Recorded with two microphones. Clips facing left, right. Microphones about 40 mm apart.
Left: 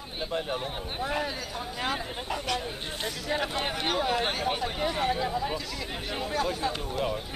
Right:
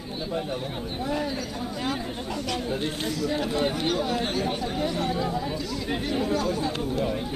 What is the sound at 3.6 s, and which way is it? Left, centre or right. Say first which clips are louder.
Speech: right 3 dB; centre.